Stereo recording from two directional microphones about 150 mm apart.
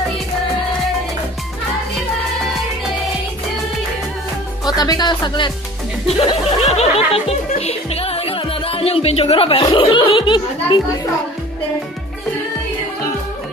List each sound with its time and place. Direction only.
4.6 s speech: 25° left (ahead or behind)
6.0 s speech: 45° left (ahead or behind)
6.7 s music: 45° left (ahead or behind)